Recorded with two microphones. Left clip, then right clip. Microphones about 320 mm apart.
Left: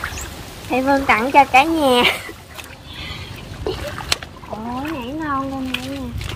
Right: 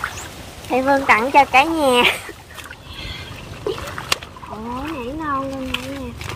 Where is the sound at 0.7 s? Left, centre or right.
Centre.